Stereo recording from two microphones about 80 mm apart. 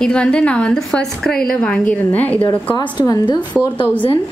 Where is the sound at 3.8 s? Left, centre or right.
Left.